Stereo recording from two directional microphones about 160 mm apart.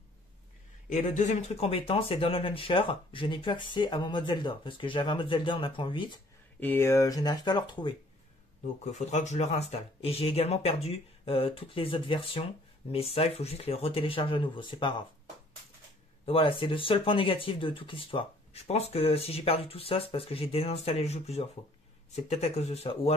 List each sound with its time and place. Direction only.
0.8 s speech: 50° left (ahead or behind); by 6.2 s 30° left (ahead or behind)
6.6 s speech: 15° left (ahead or behind); by 7.9 s 30° left (ahead or behind)
8.9 s speech: 45° left (ahead or behind); by 15.0 s 30° left (ahead or behind)
16.3 s speech: 35° left (ahead or behind)